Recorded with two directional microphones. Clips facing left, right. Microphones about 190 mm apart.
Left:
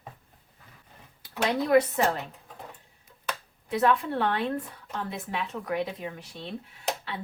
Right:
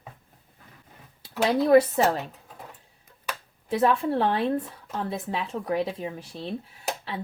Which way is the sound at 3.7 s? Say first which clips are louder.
Right 2 dB; 25° right (ahead or behind).